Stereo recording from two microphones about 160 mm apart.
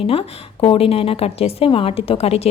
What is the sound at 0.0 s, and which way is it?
A woman's voice, 35° left (ahead or behind).